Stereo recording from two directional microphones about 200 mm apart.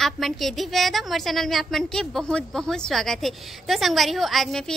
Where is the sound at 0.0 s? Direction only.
Centre (ahead or behind).